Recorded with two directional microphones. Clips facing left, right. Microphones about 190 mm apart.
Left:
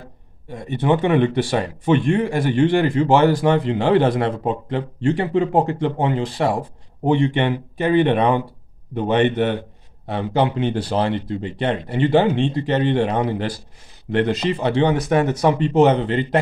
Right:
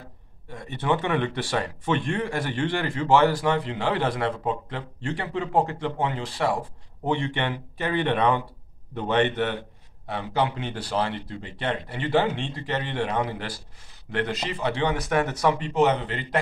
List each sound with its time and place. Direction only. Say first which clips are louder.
0.5 s speech: left 7 dB; 15° left (ahead or behind)